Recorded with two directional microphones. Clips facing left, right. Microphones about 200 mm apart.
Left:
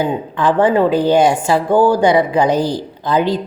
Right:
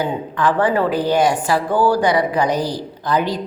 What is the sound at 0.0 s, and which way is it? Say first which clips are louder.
A woman's voice: left 3 dB; 25° left (ahead or behind).